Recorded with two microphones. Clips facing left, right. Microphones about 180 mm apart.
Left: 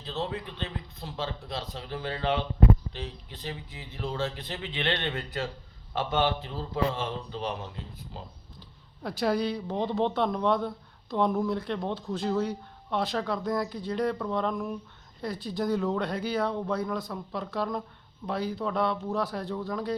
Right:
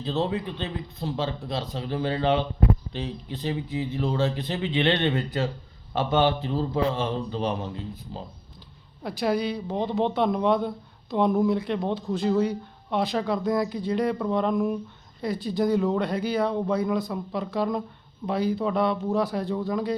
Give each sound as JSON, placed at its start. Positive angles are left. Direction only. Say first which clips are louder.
{"t": 0.0, "sound": "speech", "louder": "right 7 dB", "side_deg": -30}
{"t": 9.0, "sound": "speech", "louder": "right 2 dB", "side_deg": 0}
{"t": 15.2, "sound": "speech", "louder": "right 6 dB", "side_deg": 0}